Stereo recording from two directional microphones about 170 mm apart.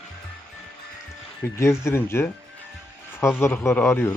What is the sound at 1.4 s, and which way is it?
Speech, 15° left (ahead or behind).